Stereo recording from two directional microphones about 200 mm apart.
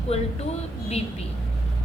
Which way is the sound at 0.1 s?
30° left (ahead or behind).